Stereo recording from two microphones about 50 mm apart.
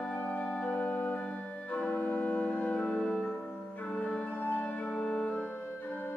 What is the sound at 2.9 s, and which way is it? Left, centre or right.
Music, centre.